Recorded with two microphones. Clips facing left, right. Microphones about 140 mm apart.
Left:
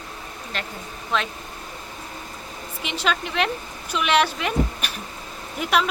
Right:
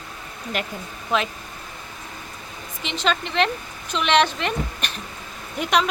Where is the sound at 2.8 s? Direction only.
10° left (ahead or behind).